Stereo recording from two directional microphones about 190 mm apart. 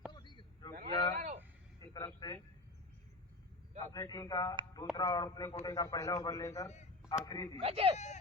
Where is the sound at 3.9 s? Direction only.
20° left (ahead or behind).